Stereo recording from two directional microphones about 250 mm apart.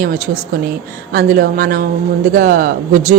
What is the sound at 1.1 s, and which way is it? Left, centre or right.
Speech, right.